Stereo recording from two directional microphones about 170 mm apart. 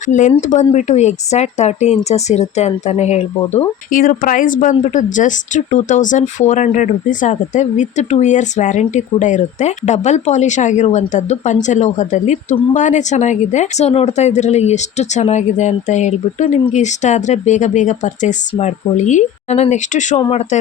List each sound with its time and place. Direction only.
0.0 s speech: 45° left (ahead or behind)
3.8 s speech: 55° left (ahead or behind)
20.1 s speech: 30° left (ahead or behind)